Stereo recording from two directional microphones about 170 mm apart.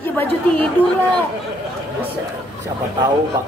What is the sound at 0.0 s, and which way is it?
Chatter, 10° left (ahead or behind).